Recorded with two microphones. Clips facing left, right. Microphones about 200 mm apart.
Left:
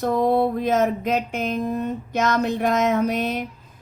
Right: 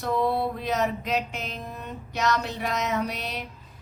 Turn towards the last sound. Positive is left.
turn(degrees=50)  # may be behind; listen again after turning